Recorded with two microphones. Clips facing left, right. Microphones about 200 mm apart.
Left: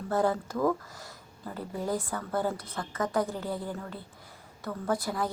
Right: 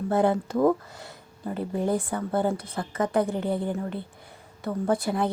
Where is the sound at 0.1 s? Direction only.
25° right (ahead or behind).